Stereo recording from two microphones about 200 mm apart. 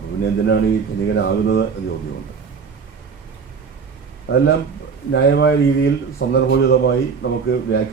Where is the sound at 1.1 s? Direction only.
60° left (ahead or behind).